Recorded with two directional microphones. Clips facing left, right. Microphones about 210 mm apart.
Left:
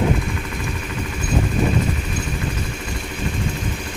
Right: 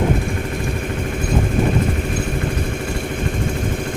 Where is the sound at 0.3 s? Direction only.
50° right (ahead or behind).